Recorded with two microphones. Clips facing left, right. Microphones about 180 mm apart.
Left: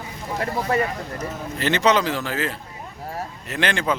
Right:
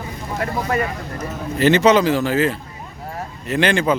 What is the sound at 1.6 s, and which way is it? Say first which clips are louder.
Speech: right 6 dB; 5° right (ahead or behind).